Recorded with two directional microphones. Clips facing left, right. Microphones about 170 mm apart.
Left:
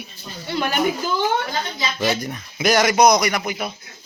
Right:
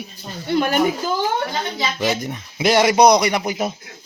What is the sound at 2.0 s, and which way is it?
Speech, 20° right (ahead or behind).